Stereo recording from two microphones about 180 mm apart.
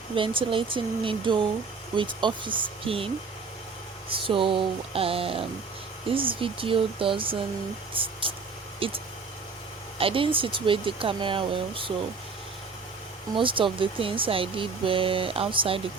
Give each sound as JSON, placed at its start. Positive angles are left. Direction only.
{"t": 0.1, "sound": "speech", "side_deg": -30}
{"t": 4.1, "sound": "speech", "side_deg": -30}
{"t": 10.0, "sound": "speech", "side_deg": -30}
{"t": 13.3, "sound": "speech", "side_deg": -30}